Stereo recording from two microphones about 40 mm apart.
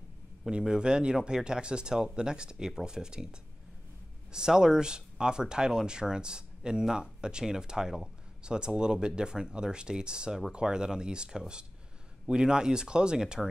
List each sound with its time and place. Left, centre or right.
0.5 s speech: right